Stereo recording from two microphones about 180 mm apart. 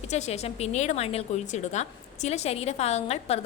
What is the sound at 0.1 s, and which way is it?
A woman's voice, 35° left (ahead or behind).